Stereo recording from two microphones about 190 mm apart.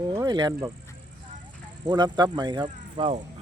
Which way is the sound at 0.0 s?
20° right (ahead or behind).